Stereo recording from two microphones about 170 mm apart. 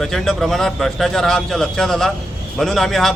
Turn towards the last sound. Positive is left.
turn(degrees=0)  # may be behind; listen again after turning